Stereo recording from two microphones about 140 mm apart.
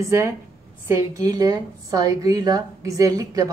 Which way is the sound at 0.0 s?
20° right (ahead or behind).